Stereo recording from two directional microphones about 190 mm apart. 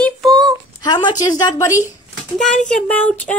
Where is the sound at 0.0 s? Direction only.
Centre (ahead or behind).